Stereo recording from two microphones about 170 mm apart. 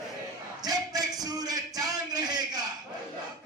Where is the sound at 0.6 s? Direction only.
20° right (ahead or behind).